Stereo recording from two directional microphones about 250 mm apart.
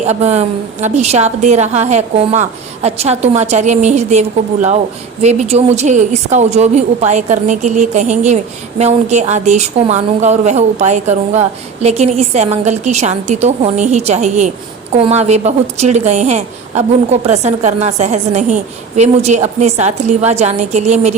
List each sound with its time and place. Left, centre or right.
0.1 s a woman's voice: right